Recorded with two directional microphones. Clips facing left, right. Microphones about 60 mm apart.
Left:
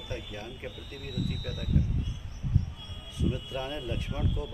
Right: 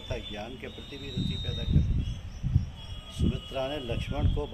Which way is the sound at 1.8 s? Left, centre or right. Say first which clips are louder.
Right 1 dB; left.